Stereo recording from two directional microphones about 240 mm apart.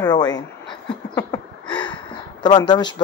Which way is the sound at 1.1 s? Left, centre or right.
Centre.